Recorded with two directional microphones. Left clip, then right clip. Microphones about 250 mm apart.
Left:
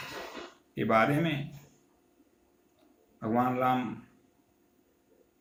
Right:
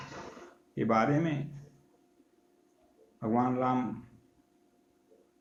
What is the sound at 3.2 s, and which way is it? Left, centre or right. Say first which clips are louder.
Speech: left 2 dB; centre.